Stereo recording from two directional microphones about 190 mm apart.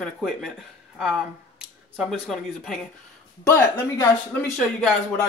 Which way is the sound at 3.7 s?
15° left (ahead or behind).